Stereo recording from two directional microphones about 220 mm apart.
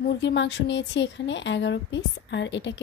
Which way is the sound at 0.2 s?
50° left (ahead or behind).